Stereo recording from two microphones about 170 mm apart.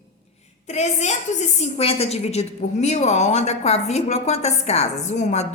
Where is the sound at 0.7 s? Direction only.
40° left (ahead or behind).